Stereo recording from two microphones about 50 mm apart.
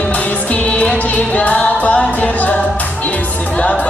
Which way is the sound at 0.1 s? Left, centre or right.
Left.